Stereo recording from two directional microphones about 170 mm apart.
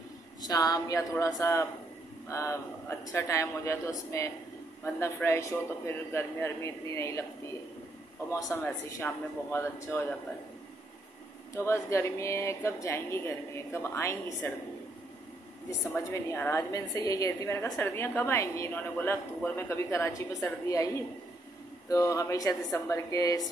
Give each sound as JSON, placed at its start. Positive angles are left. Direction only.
{"t": 0.4, "sound": "a woman's voice", "side_deg": 20}
{"t": 8.3, "sound": "a woman's voice", "side_deg": 20}
{"t": 11.5, "sound": "a woman's voice", "side_deg": 15}
{"t": 15.9, "sound": "a woman's voice", "side_deg": 15}